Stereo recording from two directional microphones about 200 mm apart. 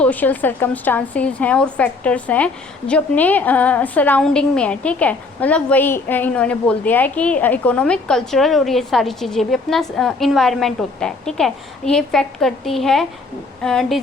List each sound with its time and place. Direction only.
0.0 s a woman's voice: 10° left (ahead or behind)